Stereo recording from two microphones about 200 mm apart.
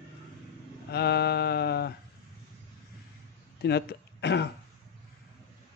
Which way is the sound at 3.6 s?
55° left (ahead or behind).